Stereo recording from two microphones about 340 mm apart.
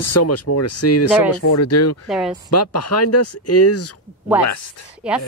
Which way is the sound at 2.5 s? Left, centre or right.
Left.